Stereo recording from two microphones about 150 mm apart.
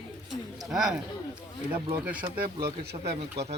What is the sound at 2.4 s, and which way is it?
Speech, 90° right.